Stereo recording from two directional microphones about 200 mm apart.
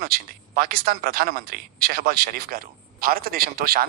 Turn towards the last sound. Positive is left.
turn(degrees=-50)  # may be behind; listen again after turning